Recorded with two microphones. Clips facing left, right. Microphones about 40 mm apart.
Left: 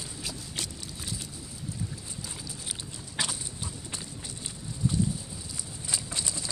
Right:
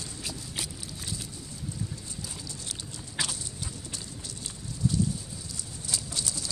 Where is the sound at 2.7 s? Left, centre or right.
Centre.